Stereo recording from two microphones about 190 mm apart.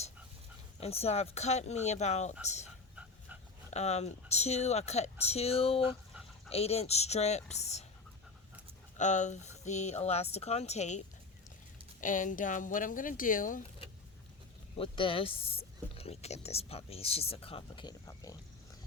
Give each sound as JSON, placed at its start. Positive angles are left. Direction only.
{"t": 0.8, "sound": "speech", "side_deg": 30}
{"t": 2.9, "sound": "dog", "side_deg": -5}
{"t": 3.7, "sound": "speech", "side_deg": 35}
{"t": 9.0, "sound": "speech", "side_deg": 40}
{"t": 14.8, "sound": "speech", "side_deg": 25}